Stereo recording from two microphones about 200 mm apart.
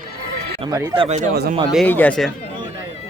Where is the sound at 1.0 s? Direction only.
35° right (ahead or behind).